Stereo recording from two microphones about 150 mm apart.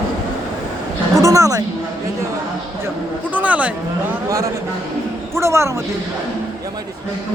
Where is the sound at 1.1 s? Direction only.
20° right (ahead or behind).